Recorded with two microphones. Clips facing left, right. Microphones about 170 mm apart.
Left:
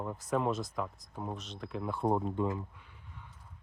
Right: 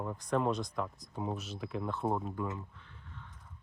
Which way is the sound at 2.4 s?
25° left (ahead or behind).